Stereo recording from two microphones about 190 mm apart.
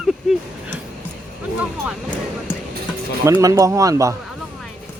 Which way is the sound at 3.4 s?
20° right (ahead or behind).